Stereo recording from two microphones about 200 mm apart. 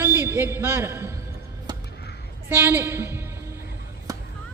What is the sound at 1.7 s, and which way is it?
Music, 20° right (ahead or behind).